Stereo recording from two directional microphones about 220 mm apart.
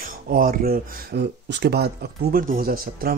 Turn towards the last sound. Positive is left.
turn(degrees=-40)  # may be behind; listen again after turning